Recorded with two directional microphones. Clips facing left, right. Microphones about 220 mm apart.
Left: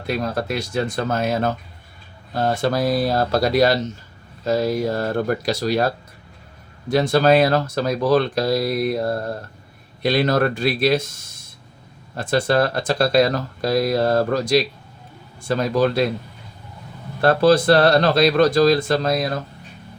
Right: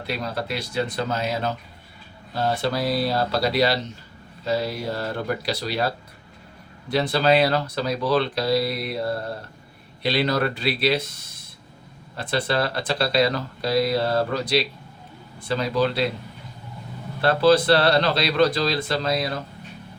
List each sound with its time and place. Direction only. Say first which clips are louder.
0.1 s speech: left 5 dB; 50° left (ahead or behind)
12.1 s speech: left 6 dB; 45° left (ahead or behind)
17.2 s speech: left 2 dB; 45° left (ahead or behind)